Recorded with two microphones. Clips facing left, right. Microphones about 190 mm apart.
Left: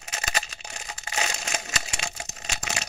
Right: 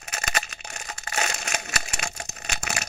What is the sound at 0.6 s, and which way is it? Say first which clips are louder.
Crumpling: right 1 dB; 15° left (ahead or behind).